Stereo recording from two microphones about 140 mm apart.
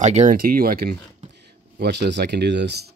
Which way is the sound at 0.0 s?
55° right (ahead or behind).